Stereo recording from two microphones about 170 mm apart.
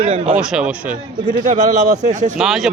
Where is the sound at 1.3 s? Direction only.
50° right (ahead or behind).